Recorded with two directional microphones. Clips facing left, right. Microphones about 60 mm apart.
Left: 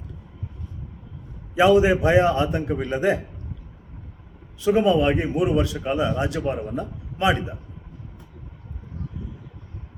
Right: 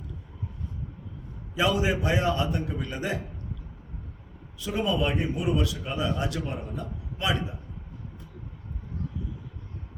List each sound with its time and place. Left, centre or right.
1.5 s a man's voice: left
4.6 s a man's voice: left